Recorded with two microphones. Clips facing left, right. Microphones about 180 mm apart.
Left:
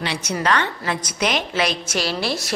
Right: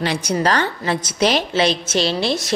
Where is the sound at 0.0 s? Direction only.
40° right (ahead or behind).